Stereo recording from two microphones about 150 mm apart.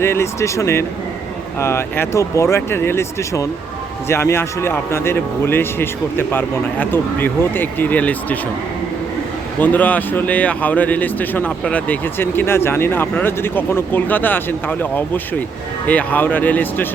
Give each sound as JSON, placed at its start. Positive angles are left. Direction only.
{"t": 0.0, "sound": "speech", "side_deg": 15}
{"t": 9.6, "sound": "speech", "side_deg": 10}